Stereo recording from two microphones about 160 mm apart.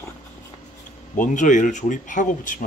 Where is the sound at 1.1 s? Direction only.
55° left (ahead or behind).